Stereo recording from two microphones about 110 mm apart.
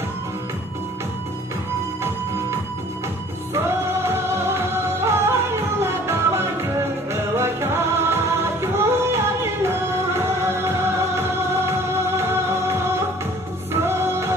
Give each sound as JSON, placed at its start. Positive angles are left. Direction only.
{"t": 3.5, "sound": "music", "side_deg": -25}